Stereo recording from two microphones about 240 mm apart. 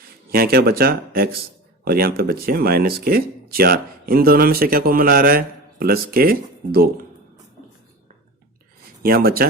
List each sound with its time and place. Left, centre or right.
0.3 s speech: right
9.0 s speech: right